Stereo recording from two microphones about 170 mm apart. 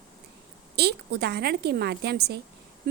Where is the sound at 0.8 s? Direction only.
70° right (ahead or behind).